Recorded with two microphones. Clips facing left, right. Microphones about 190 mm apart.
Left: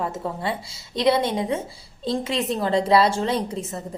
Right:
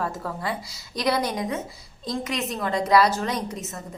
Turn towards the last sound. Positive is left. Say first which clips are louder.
# left 4 dB
turn(degrees=30)  # may be behind; listen again after turning